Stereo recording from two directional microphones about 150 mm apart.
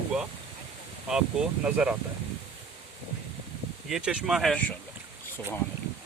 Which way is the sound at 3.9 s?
5° right (ahead or behind).